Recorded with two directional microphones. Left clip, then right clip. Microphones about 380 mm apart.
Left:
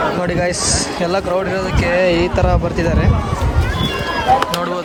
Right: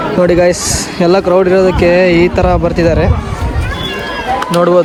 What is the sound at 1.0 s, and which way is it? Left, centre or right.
Speech, centre.